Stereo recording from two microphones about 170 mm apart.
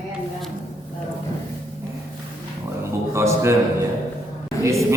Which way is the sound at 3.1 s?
15° right (ahead or behind).